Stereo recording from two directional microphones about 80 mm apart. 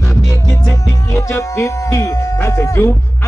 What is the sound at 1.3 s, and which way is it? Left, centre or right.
Music, left.